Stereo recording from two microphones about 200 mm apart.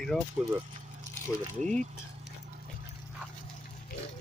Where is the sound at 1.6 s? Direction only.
35° right (ahead or behind).